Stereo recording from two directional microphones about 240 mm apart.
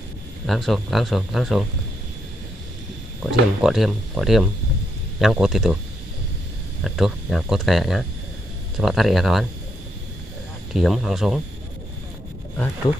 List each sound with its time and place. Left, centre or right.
0.5 s speech: centre
3.3 s speech: centre
6.8 s speech: centre
10.7 s speech: centre